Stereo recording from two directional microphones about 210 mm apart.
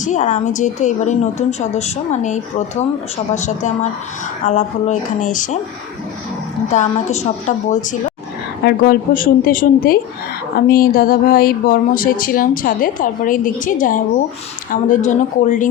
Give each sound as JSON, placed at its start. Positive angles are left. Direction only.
{"t": 0.0, "sound": "speech", "side_deg": 35}
{"t": 6.7, "sound": "a woman's voice", "side_deg": 30}